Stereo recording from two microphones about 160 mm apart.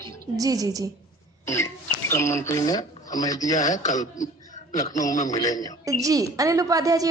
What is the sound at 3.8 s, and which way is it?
Speech, 50° left (ahead or behind).